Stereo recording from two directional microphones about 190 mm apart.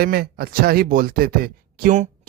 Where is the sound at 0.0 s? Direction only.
55° right (ahead or behind).